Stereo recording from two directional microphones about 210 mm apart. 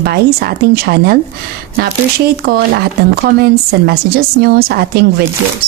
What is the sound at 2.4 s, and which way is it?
A woman's voice, 50° right (ahead or behind).